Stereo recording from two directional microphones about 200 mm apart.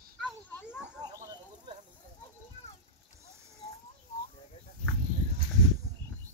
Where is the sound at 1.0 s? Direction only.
20° right (ahead or behind).